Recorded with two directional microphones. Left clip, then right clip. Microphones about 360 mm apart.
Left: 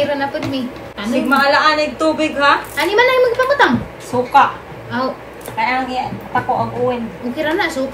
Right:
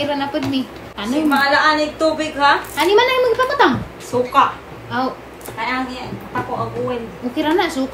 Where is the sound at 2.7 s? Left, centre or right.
Centre.